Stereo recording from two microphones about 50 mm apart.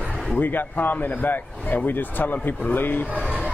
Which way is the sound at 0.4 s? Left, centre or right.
Left.